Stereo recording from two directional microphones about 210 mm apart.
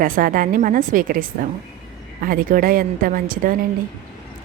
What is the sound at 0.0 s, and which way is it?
A woman's voice, 40° right (ahead or behind).